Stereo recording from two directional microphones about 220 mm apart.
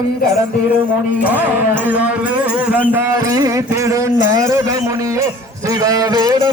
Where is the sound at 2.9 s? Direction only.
15° right (ahead or behind).